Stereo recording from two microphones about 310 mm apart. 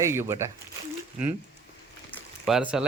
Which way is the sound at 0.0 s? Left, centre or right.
Centre.